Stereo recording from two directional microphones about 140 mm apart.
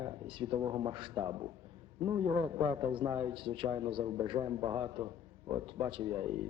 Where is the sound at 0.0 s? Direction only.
35° right (ahead or behind).